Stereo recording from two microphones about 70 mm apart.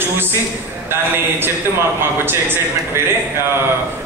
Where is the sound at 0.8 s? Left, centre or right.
Right.